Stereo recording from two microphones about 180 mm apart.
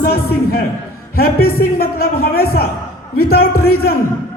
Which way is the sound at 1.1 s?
55° left (ahead or behind).